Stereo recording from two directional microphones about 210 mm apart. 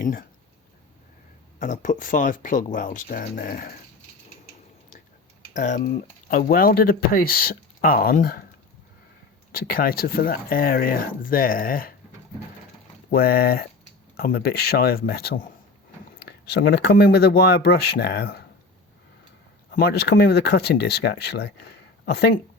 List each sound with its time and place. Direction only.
0.0 s speech: 40° left (ahead or behind)
1.5 s speech: 35° left (ahead or behind)
5.5 s speech: 35° left (ahead or behind)
9.5 s speech: 45° left (ahead or behind)
13.1 s speech: 45° left (ahead or behind)
16.5 s speech: 50° left (ahead or behind)
19.7 s speech: 50° left (ahead or behind)